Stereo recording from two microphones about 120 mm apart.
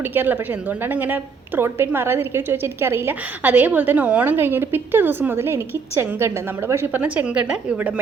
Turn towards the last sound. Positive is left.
turn(degrees=-10)  # may be behind; listen again after turning